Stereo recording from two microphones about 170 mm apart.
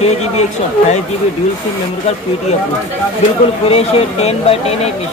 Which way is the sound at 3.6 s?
35° left (ahead or behind).